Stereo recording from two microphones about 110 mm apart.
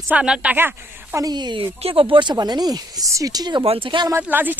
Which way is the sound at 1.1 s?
40° right (ahead or behind).